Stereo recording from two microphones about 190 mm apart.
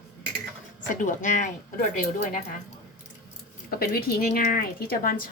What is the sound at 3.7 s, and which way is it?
A woman's voice, 50° left (ahead or behind).